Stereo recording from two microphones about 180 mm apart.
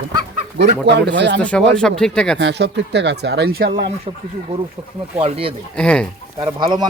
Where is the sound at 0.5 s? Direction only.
70° right (ahead or behind).